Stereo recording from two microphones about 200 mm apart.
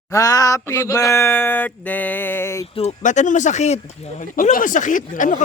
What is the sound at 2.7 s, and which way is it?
Speech, 35° left (ahead or behind).